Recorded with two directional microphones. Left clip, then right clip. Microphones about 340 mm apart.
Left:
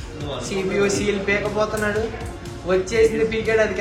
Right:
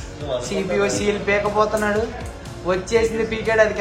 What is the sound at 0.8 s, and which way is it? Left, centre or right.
A man's voice, right.